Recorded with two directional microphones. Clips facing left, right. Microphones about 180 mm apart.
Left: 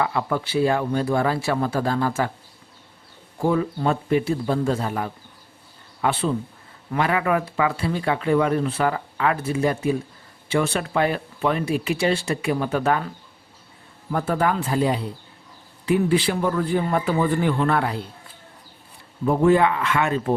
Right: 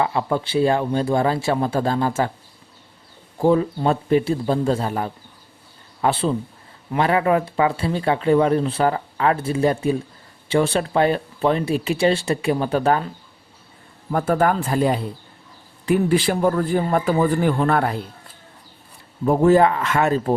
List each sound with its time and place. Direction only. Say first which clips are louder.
0.0 s speech: right 2 dB; 25° right (ahead or behind)
3.4 s speech: right 4 dB; 30° right (ahead or behind)
14.1 s a man's voice: right 3 dB; 50° right (ahead or behind)
19.2 s speech: right 3 dB; 40° right (ahead or behind)